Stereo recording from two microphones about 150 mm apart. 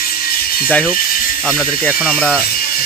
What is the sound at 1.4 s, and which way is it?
Speech, centre (ahead or behind).